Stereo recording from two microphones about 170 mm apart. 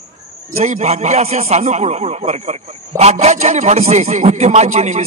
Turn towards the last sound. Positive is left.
turn(degrees=-45)  # may be behind; listen again after turning